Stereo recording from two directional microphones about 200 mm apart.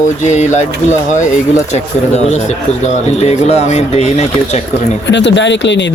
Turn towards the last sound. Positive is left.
turn(degrees=65)  # may be behind; listen again after turning